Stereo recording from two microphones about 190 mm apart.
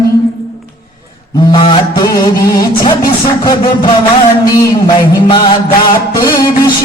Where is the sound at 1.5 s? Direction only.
25° left (ahead or behind).